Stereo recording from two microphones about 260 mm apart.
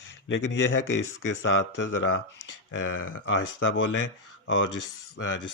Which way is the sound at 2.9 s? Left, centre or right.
Left.